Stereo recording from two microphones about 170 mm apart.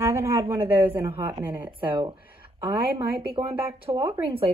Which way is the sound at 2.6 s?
25° right (ahead or behind).